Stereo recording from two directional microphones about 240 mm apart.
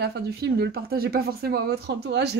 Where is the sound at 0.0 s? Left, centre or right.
Right.